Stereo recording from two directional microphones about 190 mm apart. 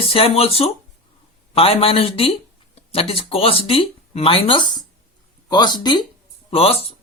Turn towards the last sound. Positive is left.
turn(degrees=30)  # may be behind; listen again after turning